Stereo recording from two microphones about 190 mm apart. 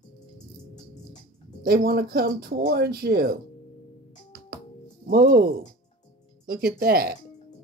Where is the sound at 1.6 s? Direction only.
50° right (ahead or behind).